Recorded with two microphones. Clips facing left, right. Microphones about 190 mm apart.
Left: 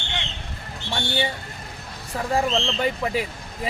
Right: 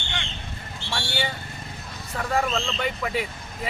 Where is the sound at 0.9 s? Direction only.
20° left (ahead or behind).